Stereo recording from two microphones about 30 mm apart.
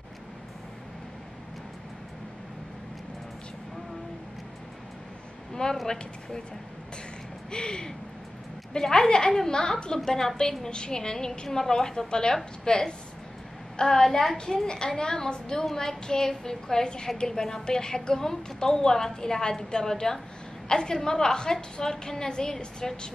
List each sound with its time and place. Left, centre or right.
5.5 s a sound: left
7.5 s a woman's voice: left
15.6 s a woman's voice: centre